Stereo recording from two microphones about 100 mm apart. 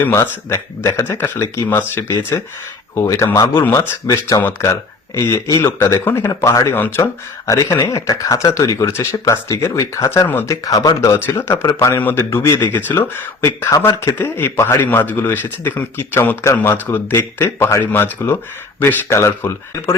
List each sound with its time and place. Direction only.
0.0 s speech: 25° left (ahead or behind)
6.7 s speech: 20° left (ahead or behind)
7.0 s speech: 30° left (ahead or behind)
10.2 s speech: 20° left (ahead or behind)
10.5 s speech: 40° left (ahead or behind)
11.2 s speech: 25° left (ahead or behind)